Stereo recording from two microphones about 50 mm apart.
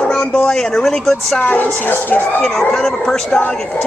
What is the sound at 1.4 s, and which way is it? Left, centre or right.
Speech, left.